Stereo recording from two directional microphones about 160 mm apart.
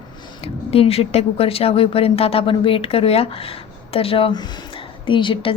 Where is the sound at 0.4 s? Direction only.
40° left (ahead or behind).